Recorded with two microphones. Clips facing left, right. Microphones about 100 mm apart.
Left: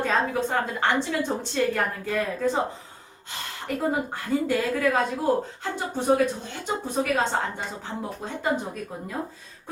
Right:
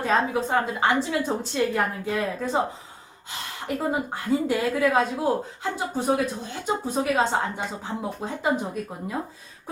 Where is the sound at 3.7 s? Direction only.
10° right (ahead or behind).